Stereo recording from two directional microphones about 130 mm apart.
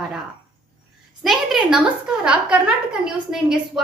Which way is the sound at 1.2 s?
Centre (ahead or behind).